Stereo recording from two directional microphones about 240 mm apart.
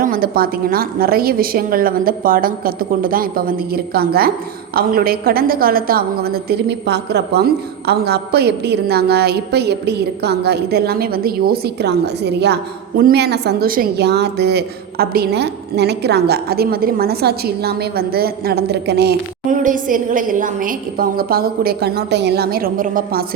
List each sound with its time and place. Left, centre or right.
0.0 s a woman's voice: right